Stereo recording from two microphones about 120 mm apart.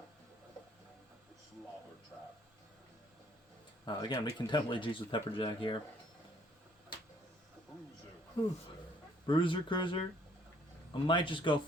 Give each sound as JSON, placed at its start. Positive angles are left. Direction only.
{"t": 3.8, "sound": "speech", "side_deg": 35}
{"t": 8.4, "sound": "speech", "side_deg": 45}
{"t": 11.0, "sound": "speech", "side_deg": 45}